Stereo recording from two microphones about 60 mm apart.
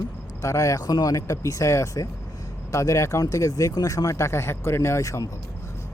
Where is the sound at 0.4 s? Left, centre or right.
Left.